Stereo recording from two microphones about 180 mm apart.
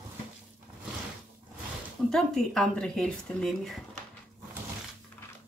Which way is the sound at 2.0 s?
5° left (ahead or behind).